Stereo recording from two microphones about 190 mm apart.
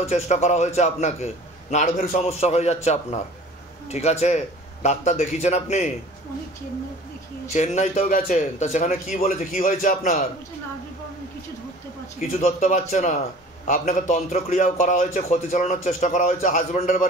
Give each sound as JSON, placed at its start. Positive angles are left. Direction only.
{"t": 0.0, "sound": "a man's voice", "side_deg": 35}
{"t": 7.5, "sound": "a man's voice", "side_deg": 35}
{"t": 12.2, "sound": "a man's voice", "side_deg": 40}